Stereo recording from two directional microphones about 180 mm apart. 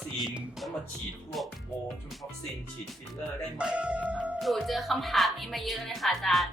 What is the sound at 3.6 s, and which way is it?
Speech, 5° right (ahead or behind).